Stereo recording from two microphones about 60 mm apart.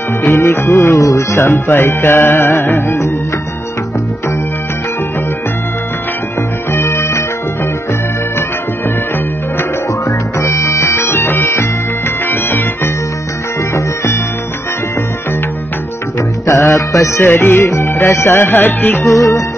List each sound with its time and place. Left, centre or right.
0.2 s music: left
0.9 s speech: left
1.5 s music: left
6.7 s music: left
10.4 s music: left
16.4 s music: left
17.2 s music: left
19.0 s speech: left